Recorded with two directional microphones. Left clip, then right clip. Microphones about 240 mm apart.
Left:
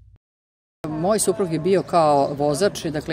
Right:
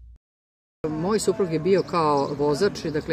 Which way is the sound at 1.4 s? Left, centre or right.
Left.